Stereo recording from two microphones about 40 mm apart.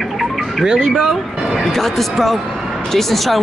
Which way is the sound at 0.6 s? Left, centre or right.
Centre.